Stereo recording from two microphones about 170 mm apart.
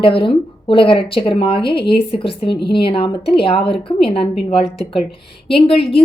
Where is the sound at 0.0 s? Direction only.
30° left (ahead or behind).